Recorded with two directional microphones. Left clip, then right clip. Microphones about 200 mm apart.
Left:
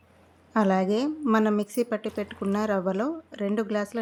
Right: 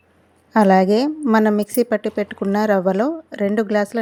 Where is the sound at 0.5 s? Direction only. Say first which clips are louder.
Right 10 dB; 30° right (ahead or behind).